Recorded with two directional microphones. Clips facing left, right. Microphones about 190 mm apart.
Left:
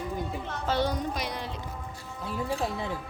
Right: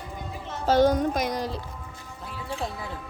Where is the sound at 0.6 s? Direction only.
45° right (ahead or behind).